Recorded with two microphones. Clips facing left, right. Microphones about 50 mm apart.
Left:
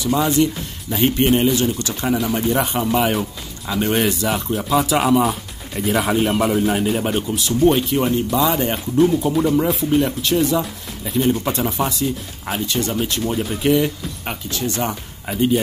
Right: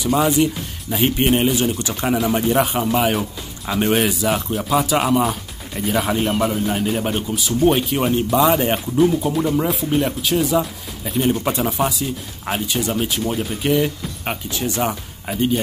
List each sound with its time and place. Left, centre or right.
0.0 s speech: centre
1.3 s speech: right
2.5 s speech: centre
3.6 s speech: centre
4.0 s speech: centre
6.5 s a man's voice: centre
6.8 s speech: centre
7.9 s speech: centre
8.7 s speech: centre
14.2 s speech: right
14.9 s speech: centre